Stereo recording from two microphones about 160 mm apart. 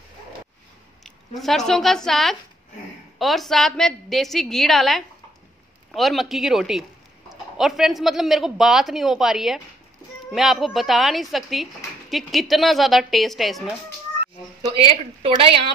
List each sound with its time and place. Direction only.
1.0 s speech: centre (ahead or behind)
15.2 s a woman's voice: 35° right (ahead or behind)